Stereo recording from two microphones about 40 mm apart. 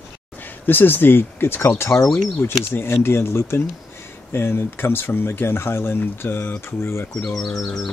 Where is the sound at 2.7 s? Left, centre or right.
Left.